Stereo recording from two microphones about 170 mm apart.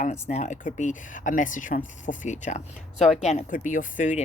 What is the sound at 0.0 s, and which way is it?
Speech, 40° left (ahead or behind).